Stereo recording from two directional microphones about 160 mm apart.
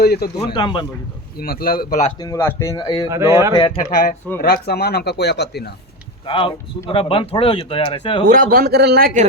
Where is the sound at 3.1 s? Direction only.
20° right (ahead or behind).